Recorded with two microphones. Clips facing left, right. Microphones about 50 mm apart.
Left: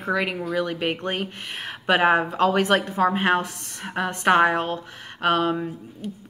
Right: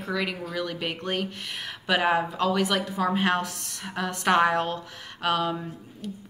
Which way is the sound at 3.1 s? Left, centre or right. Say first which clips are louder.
Left 3 dB; left.